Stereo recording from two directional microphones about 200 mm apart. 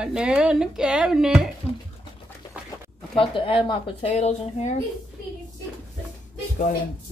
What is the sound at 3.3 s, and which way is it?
Speech, 25° left (ahead or behind).